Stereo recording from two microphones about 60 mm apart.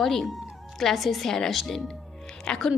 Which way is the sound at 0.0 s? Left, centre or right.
Centre.